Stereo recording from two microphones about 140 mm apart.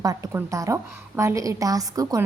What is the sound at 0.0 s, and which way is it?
A woman's voice, 25° right (ahead or behind).